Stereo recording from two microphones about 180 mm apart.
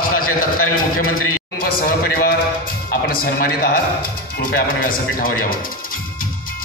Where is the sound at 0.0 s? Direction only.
50° left (ahead or behind).